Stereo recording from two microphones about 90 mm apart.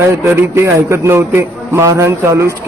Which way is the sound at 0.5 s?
30° right (ahead or behind).